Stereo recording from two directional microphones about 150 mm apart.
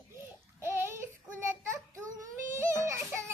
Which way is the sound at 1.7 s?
20° right (ahead or behind).